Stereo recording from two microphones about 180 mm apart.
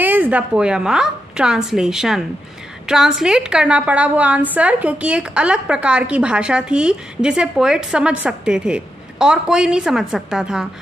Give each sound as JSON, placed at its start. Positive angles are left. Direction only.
{"t": 0.0, "sound": "a woman's voice", "side_deg": -10}